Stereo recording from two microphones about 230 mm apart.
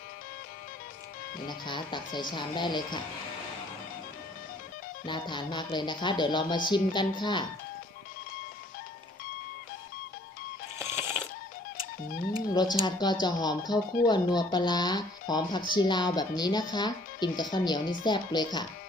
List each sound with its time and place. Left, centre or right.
1.5 s speech: centre
5.0 s speech: centre
10.8 s a sound: centre
12.8 s speech: centre